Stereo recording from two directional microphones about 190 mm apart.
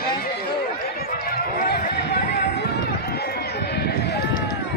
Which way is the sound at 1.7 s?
60° left (ahead or behind).